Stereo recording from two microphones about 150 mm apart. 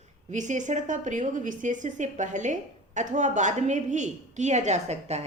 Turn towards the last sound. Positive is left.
turn(degrees=-45)  # may be behind; listen again after turning